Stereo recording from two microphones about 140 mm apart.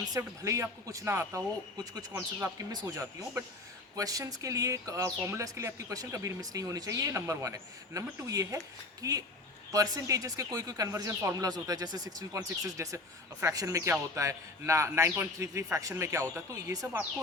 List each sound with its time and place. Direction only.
0.1 s speech: 20° right (ahead or behind)